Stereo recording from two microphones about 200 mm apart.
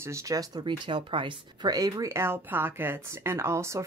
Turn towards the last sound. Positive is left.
turn(degrees=-15)  # may be behind; listen again after turning